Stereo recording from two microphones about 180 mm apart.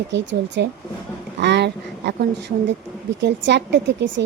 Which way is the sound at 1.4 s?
70° right (ahead or behind).